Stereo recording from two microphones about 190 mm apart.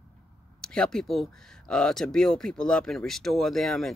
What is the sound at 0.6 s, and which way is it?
Speech, 5° left (ahead or behind).